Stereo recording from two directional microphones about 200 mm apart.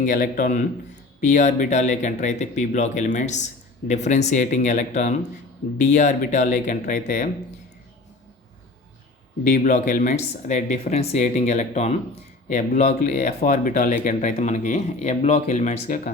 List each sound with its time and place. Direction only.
0.0 s speech: 45° left (ahead or behind)
9.5 s speech: 40° left (ahead or behind)